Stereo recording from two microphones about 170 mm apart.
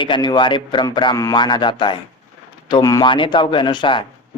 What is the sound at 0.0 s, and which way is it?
Speech, 25° left (ahead or behind).